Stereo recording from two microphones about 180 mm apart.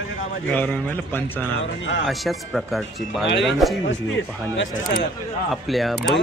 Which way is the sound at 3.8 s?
90° left.